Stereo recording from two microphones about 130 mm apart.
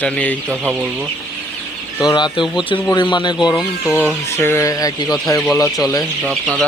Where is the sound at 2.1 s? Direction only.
35° left (ahead or behind).